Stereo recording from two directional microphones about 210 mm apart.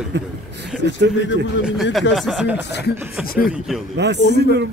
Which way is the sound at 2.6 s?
55° left (ahead or behind).